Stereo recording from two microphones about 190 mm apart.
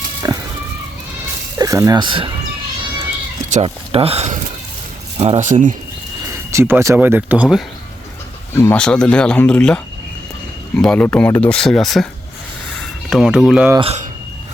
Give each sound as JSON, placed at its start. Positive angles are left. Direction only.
{"t": 0.2, "sound": "a sound", "side_deg": -20}
{"t": 1.5, "sound": "speech", "side_deg": -20}
{"t": 3.5, "sound": "speech", "side_deg": -30}
{"t": 6.2, "sound": "speech", "side_deg": -15}
{"t": 8.5, "sound": "speech", "side_deg": 10}
{"t": 13.7, "sound": "speech", "side_deg": -35}